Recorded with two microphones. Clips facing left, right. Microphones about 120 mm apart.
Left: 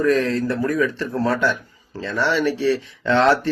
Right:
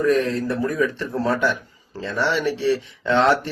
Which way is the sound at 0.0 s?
25° right (ahead or behind).